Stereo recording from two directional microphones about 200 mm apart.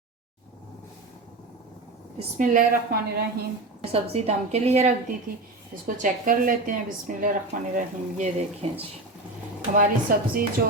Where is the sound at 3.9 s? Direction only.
30° right (ahead or behind).